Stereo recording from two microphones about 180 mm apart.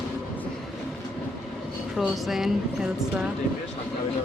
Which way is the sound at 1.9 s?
Centre (ahead or behind).